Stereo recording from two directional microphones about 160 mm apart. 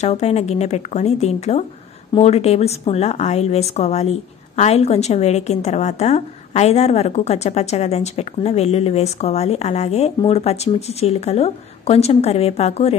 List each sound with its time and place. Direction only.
0.0 s speech: 45° left (ahead or behind)